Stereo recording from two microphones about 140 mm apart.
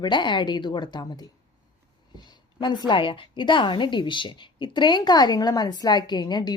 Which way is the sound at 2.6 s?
30° left (ahead or behind).